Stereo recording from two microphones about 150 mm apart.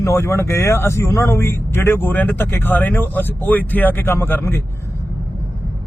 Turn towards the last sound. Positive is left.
turn(degrees=15)  # may be behind; listen again after turning